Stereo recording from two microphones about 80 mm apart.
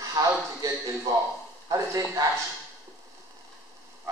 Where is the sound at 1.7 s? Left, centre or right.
Right.